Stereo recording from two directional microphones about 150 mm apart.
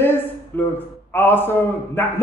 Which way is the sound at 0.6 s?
15° left (ahead or behind).